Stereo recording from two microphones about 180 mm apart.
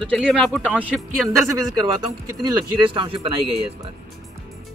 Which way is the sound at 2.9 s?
25° right (ahead or behind).